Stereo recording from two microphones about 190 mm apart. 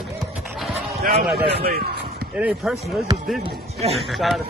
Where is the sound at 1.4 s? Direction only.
55° right (ahead or behind).